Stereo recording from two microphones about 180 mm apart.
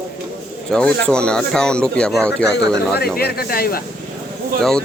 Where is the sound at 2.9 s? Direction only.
60° left (ahead or behind).